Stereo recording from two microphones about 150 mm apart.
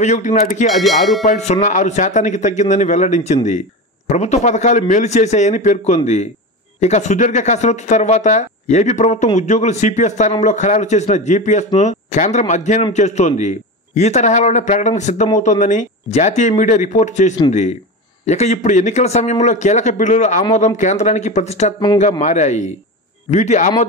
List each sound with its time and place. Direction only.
0.0 s speech: 50° left (ahead or behind)
0.7 s music: centre (ahead or behind)
1.2 s speech: 50° left (ahead or behind)